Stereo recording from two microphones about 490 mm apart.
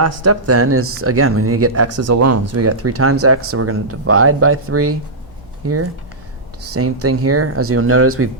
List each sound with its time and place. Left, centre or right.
0.0 s speech: right